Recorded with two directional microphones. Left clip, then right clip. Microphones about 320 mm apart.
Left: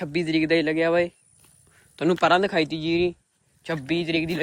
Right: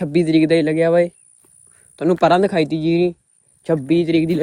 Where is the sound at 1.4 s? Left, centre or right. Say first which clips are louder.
Even; centre.